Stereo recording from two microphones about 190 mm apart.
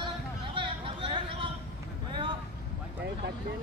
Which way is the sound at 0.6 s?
25° right (ahead or behind).